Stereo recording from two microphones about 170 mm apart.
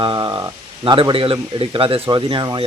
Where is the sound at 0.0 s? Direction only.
25° right (ahead or behind).